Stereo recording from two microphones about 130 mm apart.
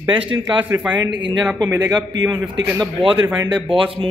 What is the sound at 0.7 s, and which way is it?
A man's voice, 25° right (ahead or behind).